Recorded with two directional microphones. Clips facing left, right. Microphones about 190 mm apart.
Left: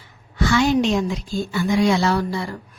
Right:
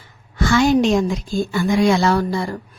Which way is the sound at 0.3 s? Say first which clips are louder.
Right 3 dB; 45° right (ahead or behind).